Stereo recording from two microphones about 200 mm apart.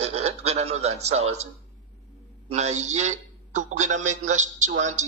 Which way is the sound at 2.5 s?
35° right (ahead or behind).